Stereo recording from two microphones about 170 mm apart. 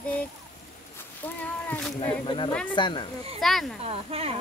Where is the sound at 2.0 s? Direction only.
30° left (ahead or behind).